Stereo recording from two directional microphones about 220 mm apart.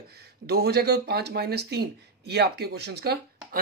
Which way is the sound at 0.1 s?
45° right (ahead or behind).